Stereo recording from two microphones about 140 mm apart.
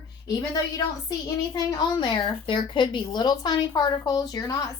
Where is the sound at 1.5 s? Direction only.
30° left (ahead or behind).